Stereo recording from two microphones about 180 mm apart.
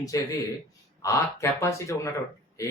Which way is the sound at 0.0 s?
20° left (ahead or behind).